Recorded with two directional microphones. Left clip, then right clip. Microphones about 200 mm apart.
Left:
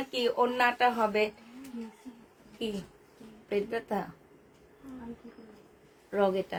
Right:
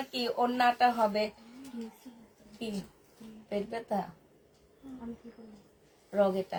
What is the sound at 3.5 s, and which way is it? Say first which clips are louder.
Speech: left 2 dB; 40° left (ahead or behind).